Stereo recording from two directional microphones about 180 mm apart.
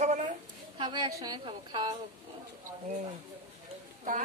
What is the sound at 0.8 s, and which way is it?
A woman's voice, 20° right (ahead or behind).